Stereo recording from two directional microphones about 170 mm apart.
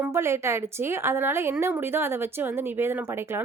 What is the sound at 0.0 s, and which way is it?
A woman's voice, 15° right (ahead or behind).